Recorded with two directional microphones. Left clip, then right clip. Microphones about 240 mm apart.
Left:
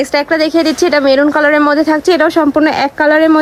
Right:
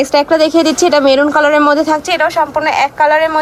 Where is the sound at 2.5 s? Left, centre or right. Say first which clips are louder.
Left 1 dB; left.